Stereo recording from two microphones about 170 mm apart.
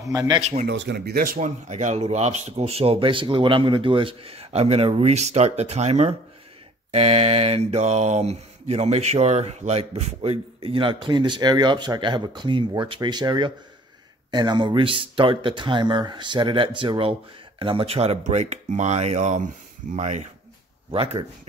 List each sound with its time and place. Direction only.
0.0 s speech: 20° right (ahead or behind)
0.4 s mantra: 40° right (ahead or behind)
0.7 s mantra: 90° right; by 21.3 s 30° right (ahead or behind)